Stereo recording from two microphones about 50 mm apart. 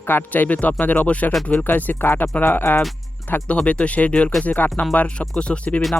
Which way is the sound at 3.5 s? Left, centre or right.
Left.